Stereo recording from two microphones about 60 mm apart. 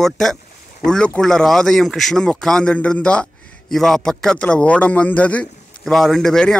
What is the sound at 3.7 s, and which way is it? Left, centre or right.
Speech, centre.